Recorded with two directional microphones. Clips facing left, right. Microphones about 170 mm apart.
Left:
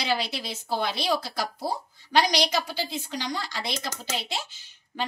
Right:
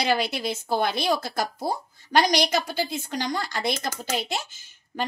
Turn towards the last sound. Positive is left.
turn(degrees=-45)  # may be behind; listen again after turning